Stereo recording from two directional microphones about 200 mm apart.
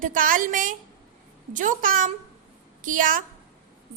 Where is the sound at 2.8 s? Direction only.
40° right (ahead or behind).